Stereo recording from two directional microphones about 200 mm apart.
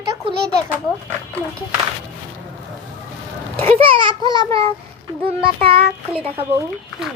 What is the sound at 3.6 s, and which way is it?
A child's voice, 30° right (ahead or behind).